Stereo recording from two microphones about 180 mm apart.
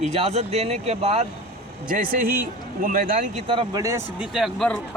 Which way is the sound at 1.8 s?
50° right (ahead or behind).